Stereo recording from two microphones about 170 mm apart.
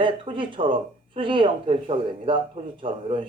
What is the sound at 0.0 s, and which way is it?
Speech, 30° right (ahead or behind).